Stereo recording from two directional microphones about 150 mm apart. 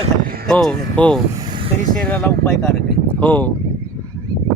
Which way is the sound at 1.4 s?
30° right (ahead or behind).